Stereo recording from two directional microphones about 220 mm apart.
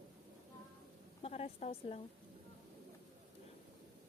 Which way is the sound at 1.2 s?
25° left (ahead or behind).